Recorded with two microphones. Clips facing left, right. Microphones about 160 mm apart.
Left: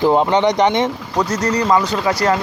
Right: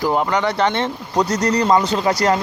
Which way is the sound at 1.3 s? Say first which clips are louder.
Left 1 dB; 40° right (ahead or behind).